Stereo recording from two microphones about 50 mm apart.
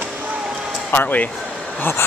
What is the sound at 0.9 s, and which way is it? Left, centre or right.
Speech, left.